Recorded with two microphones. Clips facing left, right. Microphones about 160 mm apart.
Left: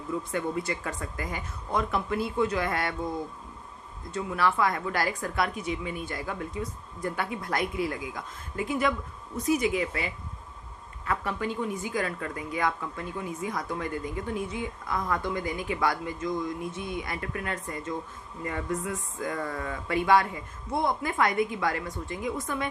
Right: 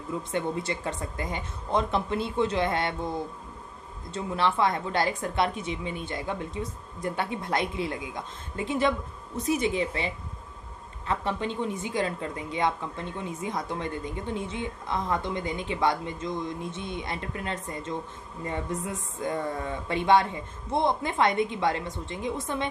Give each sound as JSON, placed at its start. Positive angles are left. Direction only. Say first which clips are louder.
{"t": 0.2, "sound": "speech", "louder": "right 3 dB", "side_deg": -25}